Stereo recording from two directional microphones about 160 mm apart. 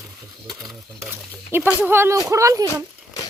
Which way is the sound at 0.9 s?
15° right (ahead or behind).